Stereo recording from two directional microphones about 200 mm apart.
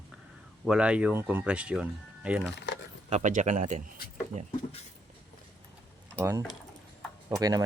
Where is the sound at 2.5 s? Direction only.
60° left (ahead or behind).